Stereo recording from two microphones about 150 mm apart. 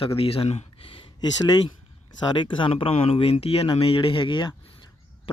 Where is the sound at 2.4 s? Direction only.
35° left (ahead or behind).